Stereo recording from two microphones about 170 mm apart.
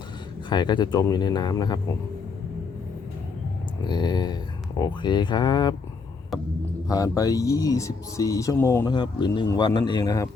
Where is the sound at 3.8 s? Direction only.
25° left (ahead or behind).